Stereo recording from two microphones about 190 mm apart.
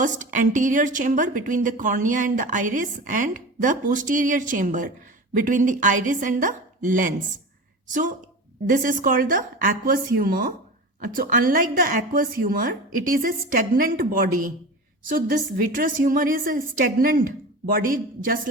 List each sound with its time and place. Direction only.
0.0 s a woman's voice: 40° right (ahead or behind)
8.7 s a woman's voice: 45° right (ahead or behind)